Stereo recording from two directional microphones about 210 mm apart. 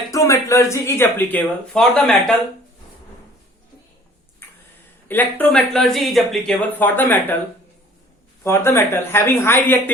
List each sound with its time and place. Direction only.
0.1 s speech: 15° left (ahead or behind)
5.0 s speech: 10° left (ahead or behind)
8.4 s speech: 10° left (ahead or behind)